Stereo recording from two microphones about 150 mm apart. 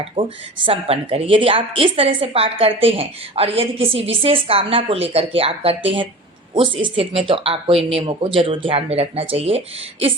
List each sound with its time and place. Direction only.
0.0 s a woman's voice: 35° right (ahead or behind)